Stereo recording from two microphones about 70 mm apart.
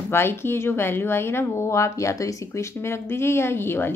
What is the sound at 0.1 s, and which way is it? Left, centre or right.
Speech, left.